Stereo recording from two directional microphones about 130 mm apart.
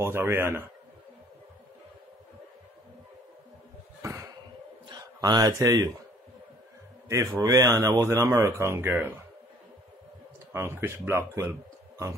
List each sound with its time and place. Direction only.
0.0 s a man's voice: 20° right (ahead or behind)
4.0 s cough: 25° right (ahead or behind)
4.8 s a man's voice: 35° right (ahead or behind)
7.3 s speech: 25° right (ahead or behind)
10.5 s speech: 20° right (ahead or behind)